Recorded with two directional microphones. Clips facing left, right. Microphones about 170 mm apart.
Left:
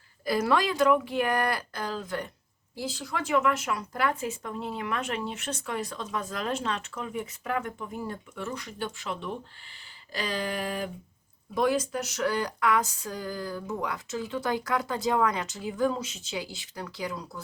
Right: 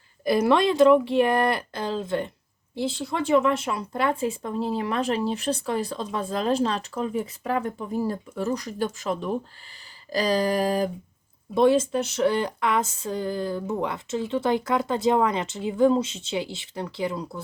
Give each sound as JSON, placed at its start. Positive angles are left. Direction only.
{"t": 0.3, "sound": "speech", "side_deg": -20}
{"t": 11.5, "sound": "speech", "side_deg": -25}